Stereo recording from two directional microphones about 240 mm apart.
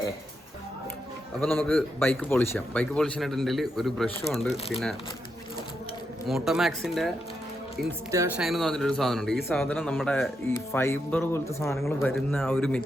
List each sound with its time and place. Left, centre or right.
1.5 s a man's voice: centre
6.2 s a man's voice: centre
7.9 s speech: centre
8.4 s a man's voice: centre